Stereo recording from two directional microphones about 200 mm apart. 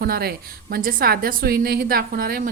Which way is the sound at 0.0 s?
50° right (ahead or behind).